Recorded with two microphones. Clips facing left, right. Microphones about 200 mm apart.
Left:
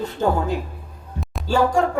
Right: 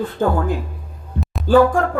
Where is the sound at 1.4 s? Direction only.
55° right (ahead or behind).